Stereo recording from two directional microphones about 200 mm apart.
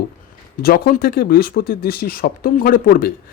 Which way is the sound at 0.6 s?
45° left (ahead or behind).